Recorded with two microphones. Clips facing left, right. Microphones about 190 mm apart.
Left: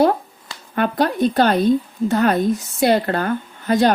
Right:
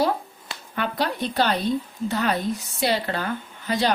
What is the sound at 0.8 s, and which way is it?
A woman's voice, 50° left (ahead or behind).